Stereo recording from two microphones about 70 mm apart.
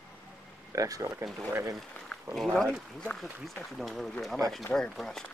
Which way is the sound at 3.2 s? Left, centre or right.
Centre.